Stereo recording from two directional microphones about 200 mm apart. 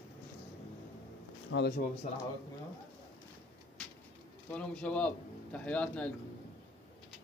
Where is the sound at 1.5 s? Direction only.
55° left (ahead or behind).